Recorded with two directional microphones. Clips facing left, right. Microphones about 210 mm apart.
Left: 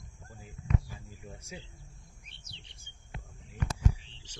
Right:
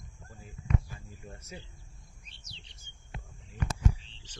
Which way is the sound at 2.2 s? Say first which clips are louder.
Even; 55° left (ahead or behind).